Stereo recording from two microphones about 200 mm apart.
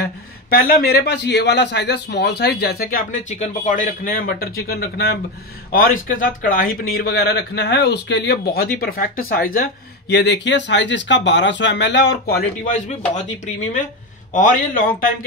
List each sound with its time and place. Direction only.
0.5 s a man's voice: 45° left (ahead or behind)
12.6 s a man's voice: 40° left (ahead or behind)
14.3 s a man's voice: 40° left (ahead or behind)